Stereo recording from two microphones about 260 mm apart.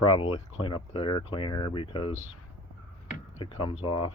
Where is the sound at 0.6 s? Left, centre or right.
Centre.